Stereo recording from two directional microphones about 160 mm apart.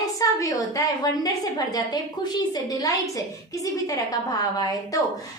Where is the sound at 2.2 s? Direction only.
25° left (ahead or behind).